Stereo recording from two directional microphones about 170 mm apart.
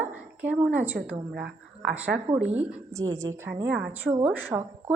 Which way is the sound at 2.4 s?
40° right (ahead or behind).